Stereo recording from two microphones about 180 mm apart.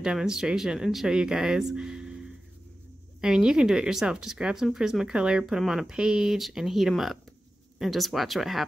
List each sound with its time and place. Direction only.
0.0 s speech: 5° right (ahead or behind)
3.2 s speech: 5° right (ahead or behind)